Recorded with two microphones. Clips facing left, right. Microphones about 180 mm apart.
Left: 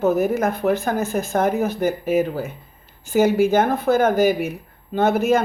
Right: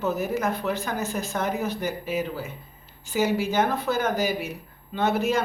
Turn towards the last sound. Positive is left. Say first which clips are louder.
# left 6 dB
turn(degrees=50)  # may be behind; listen again after turning